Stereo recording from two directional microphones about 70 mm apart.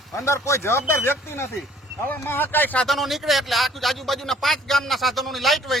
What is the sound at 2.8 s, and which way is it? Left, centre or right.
Speech, centre.